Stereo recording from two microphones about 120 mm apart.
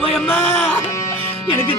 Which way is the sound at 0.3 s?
60° left (ahead or behind).